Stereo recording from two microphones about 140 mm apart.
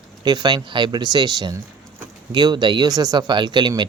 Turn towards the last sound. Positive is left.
turn(degrees=-30)  # may be behind; listen again after turning